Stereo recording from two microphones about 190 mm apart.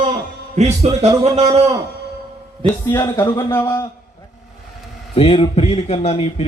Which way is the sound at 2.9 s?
15° left (ahead or behind).